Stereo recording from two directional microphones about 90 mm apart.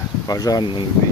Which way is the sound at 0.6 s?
65° left (ahead or behind).